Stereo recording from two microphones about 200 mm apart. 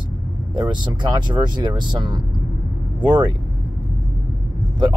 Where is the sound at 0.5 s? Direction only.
20° right (ahead or behind).